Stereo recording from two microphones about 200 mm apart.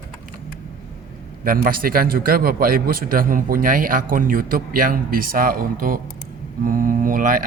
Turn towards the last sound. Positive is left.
turn(degrees=-45)  # may be behind; listen again after turning